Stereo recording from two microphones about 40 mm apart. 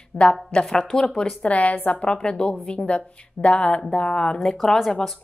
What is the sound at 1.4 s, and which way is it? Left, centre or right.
Speech, left.